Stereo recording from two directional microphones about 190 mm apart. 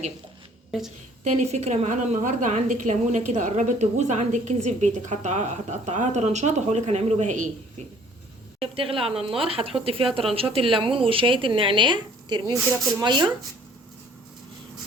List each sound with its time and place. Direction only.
1.2 s a woman's voice: 40° right (ahead or behind)
8.6 s a woman's voice: 30° right (ahead or behind)